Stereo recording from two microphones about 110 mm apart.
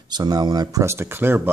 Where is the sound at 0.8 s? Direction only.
25° right (ahead or behind).